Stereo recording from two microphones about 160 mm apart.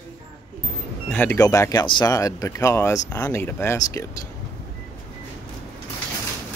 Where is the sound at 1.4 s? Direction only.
20° left (ahead or behind).